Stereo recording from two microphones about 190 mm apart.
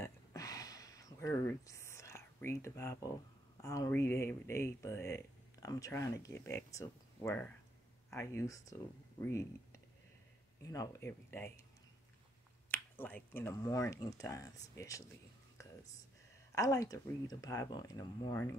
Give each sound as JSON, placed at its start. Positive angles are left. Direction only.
{"t": 0.0, "sound": "a sound", "side_deg": 15}
{"t": 3.6, "sound": "speech", "side_deg": 15}
{"t": 12.7, "sound": "speech", "side_deg": 10}
{"t": 16.5, "sound": "speech", "side_deg": 20}